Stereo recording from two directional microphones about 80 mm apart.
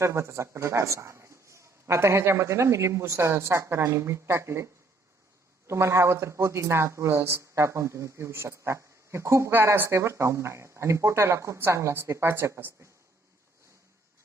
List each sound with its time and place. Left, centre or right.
0.0 s a man's voice: right
9.5 s a man's voice: right